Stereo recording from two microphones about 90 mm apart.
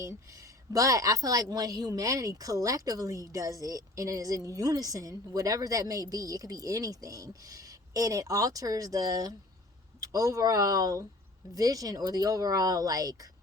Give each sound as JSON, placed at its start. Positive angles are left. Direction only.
{"t": 0.0, "sound": "a woman's voice", "side_deg": -35}